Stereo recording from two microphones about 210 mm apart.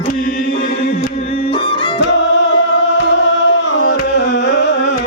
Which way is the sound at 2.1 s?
55° left (ahead or behind).